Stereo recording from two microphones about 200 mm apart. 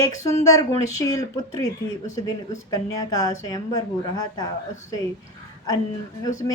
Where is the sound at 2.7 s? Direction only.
20° left (ahead or behind).